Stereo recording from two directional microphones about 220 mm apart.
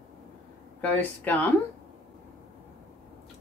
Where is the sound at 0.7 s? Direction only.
5° left (ahead or behind).